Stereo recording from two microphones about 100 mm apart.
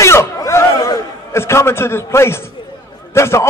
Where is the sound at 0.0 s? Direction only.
30° left (ahead or behind).